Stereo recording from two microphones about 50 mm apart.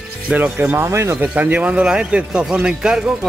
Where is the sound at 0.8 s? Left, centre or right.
Right.